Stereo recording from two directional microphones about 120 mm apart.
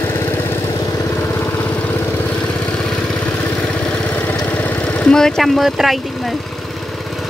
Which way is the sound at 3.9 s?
10° left (ahead or behind).